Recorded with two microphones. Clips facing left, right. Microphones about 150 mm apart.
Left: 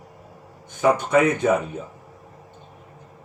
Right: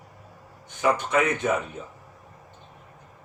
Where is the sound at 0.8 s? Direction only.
40° left (ahead or behind).